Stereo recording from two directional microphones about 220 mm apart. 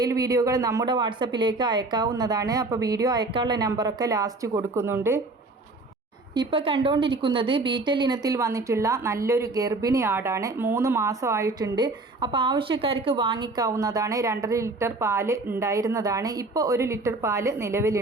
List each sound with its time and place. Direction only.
0.0 s a woman's voice: 15° right (ahead or behind)
6.3 s a woman's voice: 20° right (ahead or behind)